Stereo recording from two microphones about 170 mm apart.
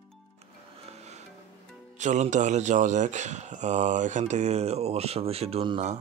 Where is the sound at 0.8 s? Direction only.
40° right (ahead or behind).